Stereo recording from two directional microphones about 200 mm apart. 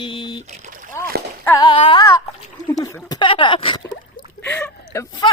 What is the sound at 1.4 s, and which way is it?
Speech, 20° left (ahead or behind).